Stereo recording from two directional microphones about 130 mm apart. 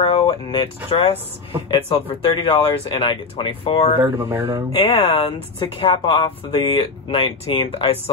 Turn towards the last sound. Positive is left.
turn(degrees=45)  # may be behind; listen again after turning